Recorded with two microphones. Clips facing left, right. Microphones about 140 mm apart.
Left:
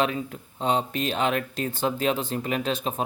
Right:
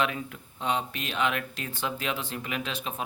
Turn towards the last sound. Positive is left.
turn(degrees=35)  # may be behind; listen again after turning